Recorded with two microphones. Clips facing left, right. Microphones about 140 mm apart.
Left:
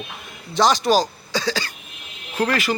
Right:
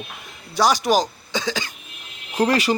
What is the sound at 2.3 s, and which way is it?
Speech, 35° right (ahead or behind).